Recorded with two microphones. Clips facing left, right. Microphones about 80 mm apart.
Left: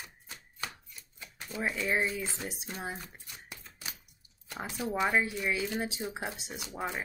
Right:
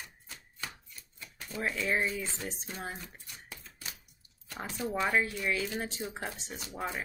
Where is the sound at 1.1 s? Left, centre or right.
Centre.